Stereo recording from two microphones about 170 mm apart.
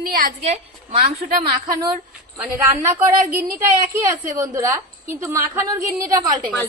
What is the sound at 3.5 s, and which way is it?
A woman's voice, 20° right (ahead or behind).